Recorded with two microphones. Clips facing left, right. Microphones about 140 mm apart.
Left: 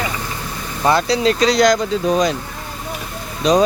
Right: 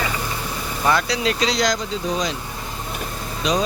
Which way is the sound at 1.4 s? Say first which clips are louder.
Left 7 dB; 55° left (ahead or behind).